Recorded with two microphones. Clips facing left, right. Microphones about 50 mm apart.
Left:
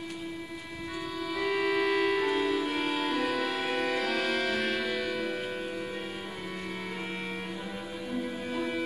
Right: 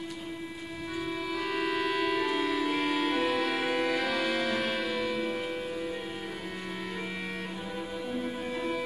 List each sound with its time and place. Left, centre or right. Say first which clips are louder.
1.3 s music: left 4 dB; centre
2.9 s music: right 1 dB; right
3.3 s music: right 1 dB; centre